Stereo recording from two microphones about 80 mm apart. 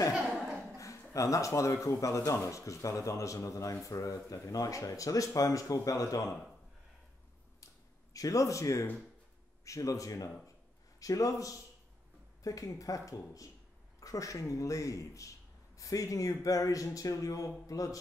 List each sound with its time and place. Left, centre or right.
0.1 s chuckle: centre
0.7 s speech: left
8.1 s speech: left